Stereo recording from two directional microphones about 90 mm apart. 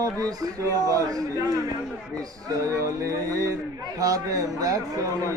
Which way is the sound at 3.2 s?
40° right (ahead or behind).